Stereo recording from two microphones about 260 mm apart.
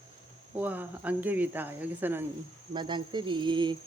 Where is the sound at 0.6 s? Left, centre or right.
Centre.